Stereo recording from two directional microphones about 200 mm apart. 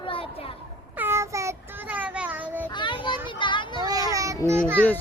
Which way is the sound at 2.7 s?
25° left (ahead or behind).